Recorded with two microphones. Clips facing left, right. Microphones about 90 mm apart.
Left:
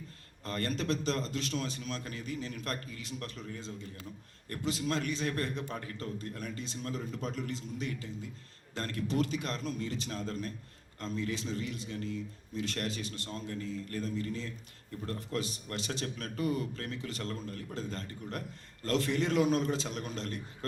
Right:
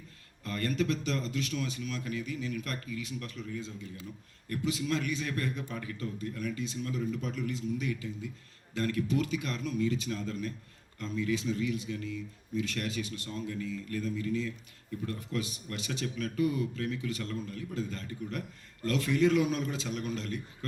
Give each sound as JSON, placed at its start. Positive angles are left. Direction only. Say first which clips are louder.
{"t": 0.4, "sound": "a man's voice", "louder": "right 2 dB", "side_deg": 35}